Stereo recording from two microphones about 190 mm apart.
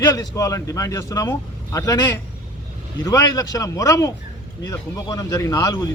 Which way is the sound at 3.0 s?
20° left (ahead or behind).